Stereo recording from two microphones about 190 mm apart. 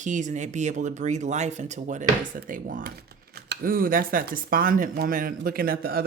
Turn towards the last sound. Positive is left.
turn(degrees=-50)  # may be behind; listen again after turning